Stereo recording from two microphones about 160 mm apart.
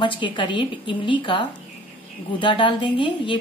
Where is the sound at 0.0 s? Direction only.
30° left (ahead or behind).